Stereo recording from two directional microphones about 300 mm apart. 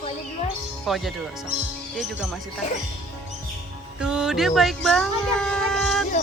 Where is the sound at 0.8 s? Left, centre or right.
Centre.